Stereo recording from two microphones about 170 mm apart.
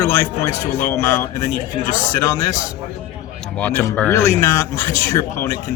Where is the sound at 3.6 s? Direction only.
5° left (ahead or behind).